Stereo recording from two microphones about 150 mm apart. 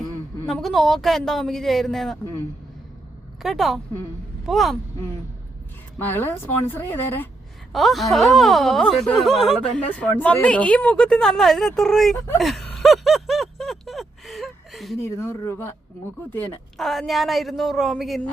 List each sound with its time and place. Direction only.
0.4 s speech: centre (ahead or behind)
3.4 s speech: centre (ahead or behind)
6.0 s speech: 15° left (ahead or behind)
7.7 s speech: centre (ahead or behind)
12.4 s a sound: centre (ahead or behind)
14.9 s speech: 20° left (ahead or behind)
16.8 s speech: centre (ahead or behind)